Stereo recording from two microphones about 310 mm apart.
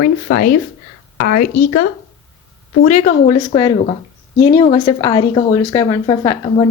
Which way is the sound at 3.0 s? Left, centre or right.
Left.